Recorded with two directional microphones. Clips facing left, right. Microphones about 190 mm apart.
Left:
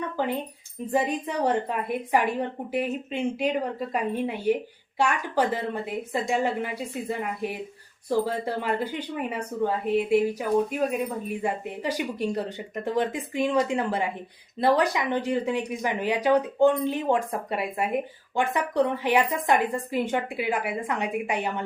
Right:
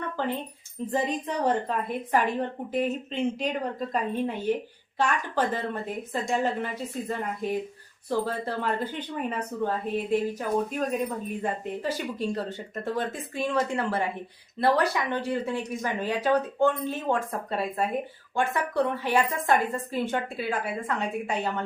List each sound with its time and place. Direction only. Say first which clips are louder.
0.9 s speech: left 2 dB; 10° left (ahead or behind)